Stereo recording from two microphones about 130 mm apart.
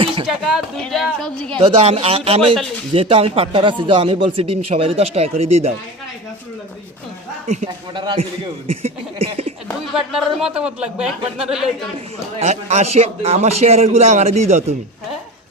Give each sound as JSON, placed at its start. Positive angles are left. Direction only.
{"t": 0.0, "sound": "a sound", "side_deg": -40}
{"t": 0.3, "sound": "speech", "side_deg": -5}
{"t": 1.5, "sound": "speech", "side_deg": -45}
{"t": 7.9, "sound": "a man's voice", "side_deg": -35}
{"t": 8.8, "sound": "a sound", "side_deg": -50}
{"t": 9.9, "sound": "speech", "side_deg": -5}
{"t": 12.4, "sound": "a man's voice", "side_deg": -60}